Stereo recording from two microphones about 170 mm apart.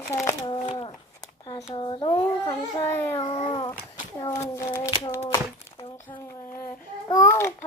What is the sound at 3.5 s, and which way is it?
A child's voice, 25° left (ahead or behind).